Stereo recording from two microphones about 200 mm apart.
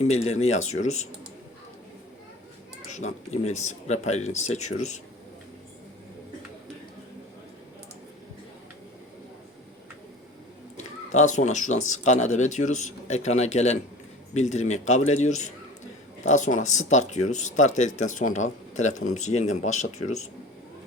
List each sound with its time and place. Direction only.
0.0 s speech: 35° left (ahead or behind)
2.9 s speech: 35° left (ahead or behind)
11.1 s speech: 35° left (ahead or behind)